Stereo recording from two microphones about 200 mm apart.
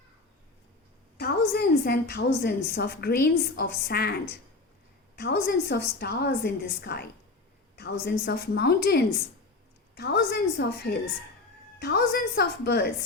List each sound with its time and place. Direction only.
1.2 s a woman's voice: 55° left (ahead or behind)
5.1 s a woman's voice: 55° left (ahead or behind)